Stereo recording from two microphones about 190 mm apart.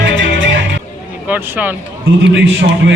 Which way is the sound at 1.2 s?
10° right (ahead or behind).